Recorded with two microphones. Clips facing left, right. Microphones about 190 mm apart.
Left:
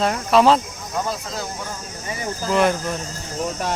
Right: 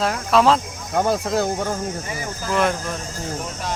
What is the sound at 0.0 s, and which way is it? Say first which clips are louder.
Speech: left 1 dB; centre (ahead or behind).